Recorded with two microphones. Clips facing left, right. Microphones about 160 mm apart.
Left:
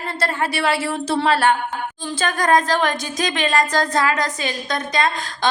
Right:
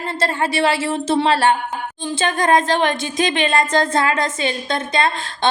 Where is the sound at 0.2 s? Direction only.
25° right (ahead or behind).